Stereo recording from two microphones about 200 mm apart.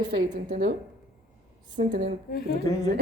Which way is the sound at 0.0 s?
65° right (ahead or behind).